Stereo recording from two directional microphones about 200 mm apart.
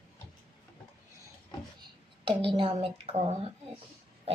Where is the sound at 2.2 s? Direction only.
25° right (ahead or behind).